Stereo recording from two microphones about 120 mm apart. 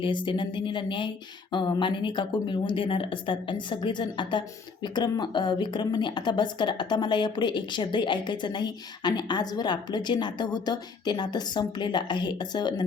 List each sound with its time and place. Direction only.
0.0 s speech: 40° left (ahead or behind)